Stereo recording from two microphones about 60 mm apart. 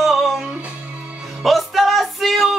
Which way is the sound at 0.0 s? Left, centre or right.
Centre.